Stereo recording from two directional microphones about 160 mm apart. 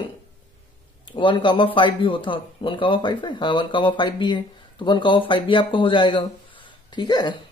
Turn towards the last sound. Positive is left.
turn(degrees=25)  # may be behind; listen again after turning